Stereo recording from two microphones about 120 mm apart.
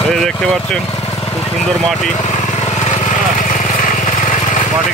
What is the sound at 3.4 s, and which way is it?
Vehicle, 90° left.